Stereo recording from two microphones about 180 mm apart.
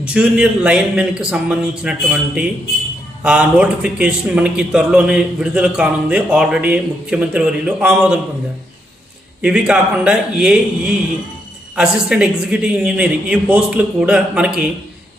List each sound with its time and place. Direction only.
0.1 s a man's voice: 5° right (ahead or behind)
9.4 s a man's voice: 5° right (ahead or behind)
11.8 s a man's voice: 5° right (ahead or behind)